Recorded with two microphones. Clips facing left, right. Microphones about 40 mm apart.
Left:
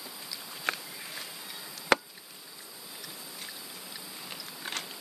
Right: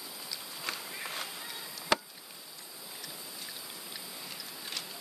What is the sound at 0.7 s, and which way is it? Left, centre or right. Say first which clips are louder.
Walk: left 7 dB; left.